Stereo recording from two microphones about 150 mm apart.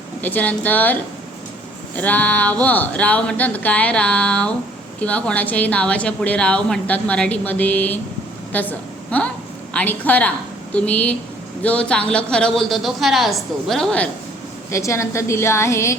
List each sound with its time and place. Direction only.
0.2 s a woman's voice: 10° left (ahead or behind)
2.0 s a woman's voice: 10° left (ahead or behind)
14.7 s a woman's voice: 20° left (ahead or behind)